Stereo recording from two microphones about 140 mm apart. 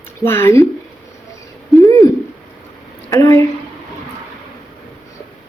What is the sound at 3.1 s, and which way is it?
Speech, 25° left (ahead or behind).